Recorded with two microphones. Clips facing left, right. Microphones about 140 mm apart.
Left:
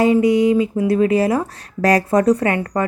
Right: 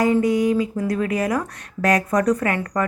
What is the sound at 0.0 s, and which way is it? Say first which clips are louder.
Speech: left 4 dB; 20° left (ahead or behind).